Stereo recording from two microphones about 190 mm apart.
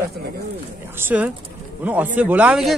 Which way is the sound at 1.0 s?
10° right (ahead or behind).